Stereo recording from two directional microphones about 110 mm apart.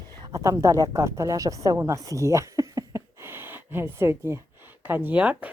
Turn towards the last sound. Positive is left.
turn(degrees=-15)  # may be behind; listen again after turning